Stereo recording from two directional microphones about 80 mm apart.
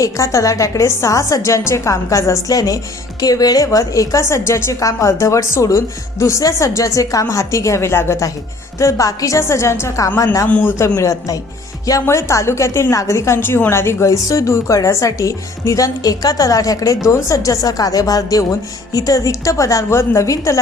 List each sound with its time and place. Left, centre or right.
0.0 s a woman's voice: left
10.5 s a man's voice: left
10.8 s a woman's voice: left